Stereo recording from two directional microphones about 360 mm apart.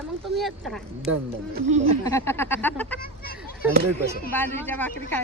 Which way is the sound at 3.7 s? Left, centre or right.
Right.